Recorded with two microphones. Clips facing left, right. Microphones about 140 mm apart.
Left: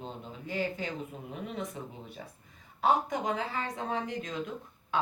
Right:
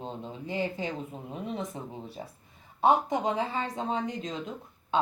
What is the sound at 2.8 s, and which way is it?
Speech, 25° right (ahead or behind).